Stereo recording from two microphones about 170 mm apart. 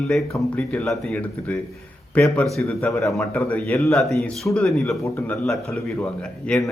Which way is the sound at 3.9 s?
Centre (ahead or behind).